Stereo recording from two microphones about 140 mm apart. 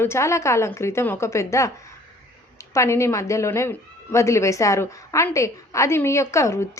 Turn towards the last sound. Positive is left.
turn(degrees=20)  # may be behind; listen again after turning